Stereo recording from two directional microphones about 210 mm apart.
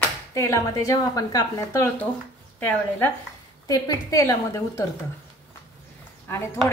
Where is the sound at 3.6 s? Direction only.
20° left (ahead or behind).